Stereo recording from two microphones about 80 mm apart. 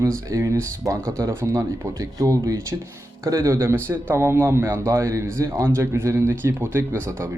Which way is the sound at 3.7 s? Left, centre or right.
Right.